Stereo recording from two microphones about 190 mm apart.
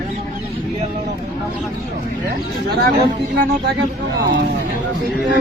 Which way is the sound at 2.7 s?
60° right (ahead or behind).